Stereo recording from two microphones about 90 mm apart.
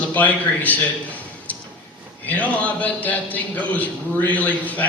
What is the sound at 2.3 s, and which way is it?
A man's voice, 15° left (ahead or behind).